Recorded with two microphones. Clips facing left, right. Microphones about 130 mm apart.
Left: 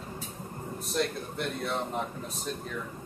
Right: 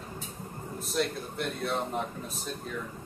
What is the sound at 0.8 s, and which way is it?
Speech, centre (ahead or behind).